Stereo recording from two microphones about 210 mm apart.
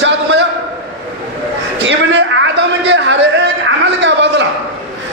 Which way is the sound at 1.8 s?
55° right (ahead or behind).